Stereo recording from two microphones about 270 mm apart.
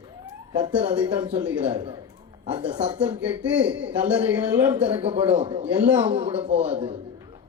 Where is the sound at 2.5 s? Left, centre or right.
Centre.